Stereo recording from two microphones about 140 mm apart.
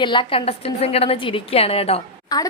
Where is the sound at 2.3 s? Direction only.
25° left (ahead or behind).